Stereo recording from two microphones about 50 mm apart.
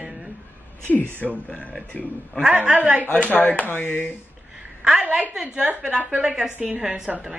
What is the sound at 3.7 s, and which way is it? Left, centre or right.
Speech, left.